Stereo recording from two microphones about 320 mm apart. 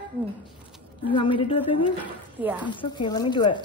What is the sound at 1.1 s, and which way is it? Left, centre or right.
Speech, centre.